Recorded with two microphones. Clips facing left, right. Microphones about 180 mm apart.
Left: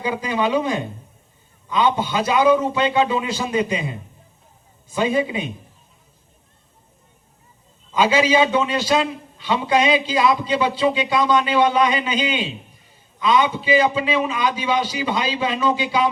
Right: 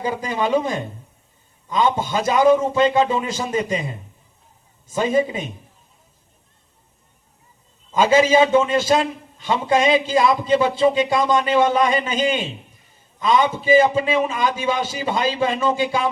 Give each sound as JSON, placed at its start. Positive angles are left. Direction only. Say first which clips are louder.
{"t": 0.0, "sound": "a man's voice", "louder": "left 1 dB", "side_deg": -45}
{"t": 7.9, "sound": "a man's voice", "louder": "right 2 dB", "side_deg": -45}